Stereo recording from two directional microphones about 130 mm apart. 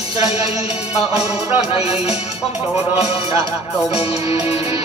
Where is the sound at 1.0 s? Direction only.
50° left (ahead or behind).